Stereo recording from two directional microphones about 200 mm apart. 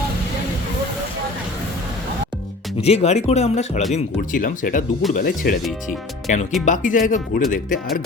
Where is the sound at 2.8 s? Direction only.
30° left (ahead or behind).